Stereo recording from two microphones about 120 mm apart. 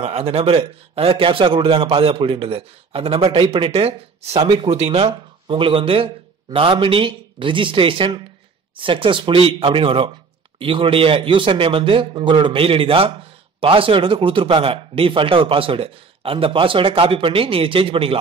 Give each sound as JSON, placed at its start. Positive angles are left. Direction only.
{"t": 0.0, "sound": "speech", "side_deg": -55}